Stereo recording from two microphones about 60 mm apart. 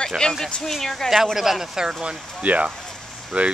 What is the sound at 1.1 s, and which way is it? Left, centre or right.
Speech, centre.